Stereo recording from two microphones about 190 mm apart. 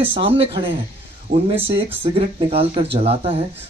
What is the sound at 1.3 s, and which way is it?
Speech, 50° right (ahead or behind).